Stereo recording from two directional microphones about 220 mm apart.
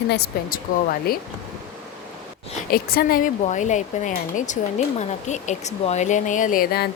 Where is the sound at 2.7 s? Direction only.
40° left (ahead or behind).